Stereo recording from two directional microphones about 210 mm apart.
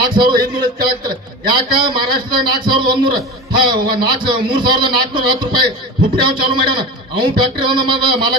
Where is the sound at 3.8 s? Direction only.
45° right (ahead or behind).